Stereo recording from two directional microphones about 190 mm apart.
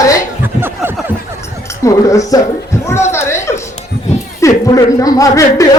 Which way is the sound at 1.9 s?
15° left (ahead or behind).